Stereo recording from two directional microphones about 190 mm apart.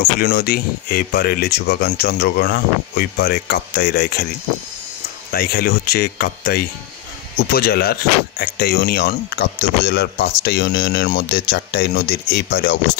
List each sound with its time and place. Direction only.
0.0 s speech: 55° left (ahead or behind)
5.3 s speech: 55° left (ahead or behind)